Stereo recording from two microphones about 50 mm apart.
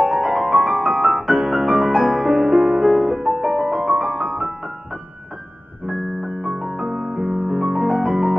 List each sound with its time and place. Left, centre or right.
0.0 s music: centre
5.9 s keyboard: centre
6.6 s music: centre